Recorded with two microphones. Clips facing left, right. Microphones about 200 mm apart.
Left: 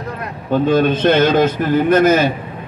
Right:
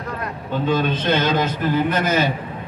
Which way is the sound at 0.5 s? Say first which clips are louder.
Left 7 dB; 50° left (ahead or behind).